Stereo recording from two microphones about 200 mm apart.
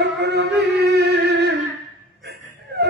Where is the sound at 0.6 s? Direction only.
60° right (ahead or behind).